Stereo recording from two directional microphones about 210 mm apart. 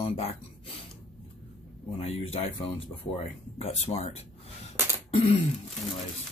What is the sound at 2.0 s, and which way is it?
Speech, 25° left (ahead or behind).